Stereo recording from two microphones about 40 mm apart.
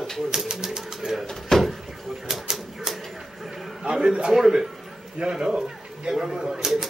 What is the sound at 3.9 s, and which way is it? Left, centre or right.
Speech, centre.